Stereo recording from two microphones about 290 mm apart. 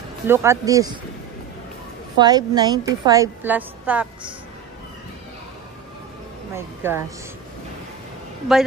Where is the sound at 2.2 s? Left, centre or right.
Centre.